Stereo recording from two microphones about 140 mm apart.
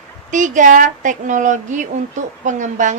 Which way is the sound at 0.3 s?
60° right (ahead or behind).